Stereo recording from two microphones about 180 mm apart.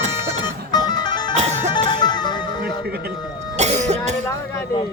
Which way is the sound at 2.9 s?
60° right (ahead or behind).